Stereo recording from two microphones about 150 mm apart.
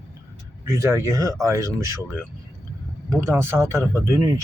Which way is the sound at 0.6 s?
20° right (ahead or behind).